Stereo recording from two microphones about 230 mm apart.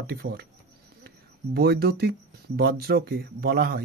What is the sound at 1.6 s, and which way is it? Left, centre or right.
Speech, right.